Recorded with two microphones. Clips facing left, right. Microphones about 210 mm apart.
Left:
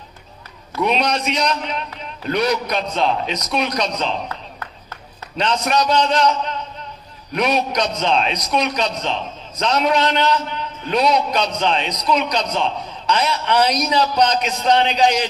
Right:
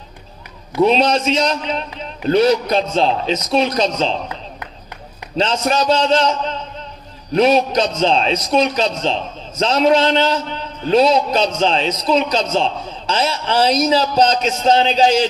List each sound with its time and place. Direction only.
0.7 s a man's voice: 30° right (ahead or behind)
5.4 s a man's voice: 30° right (ahead or behind)